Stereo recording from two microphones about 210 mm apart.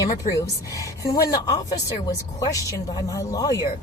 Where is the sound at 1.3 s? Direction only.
20° left (ahead or behind).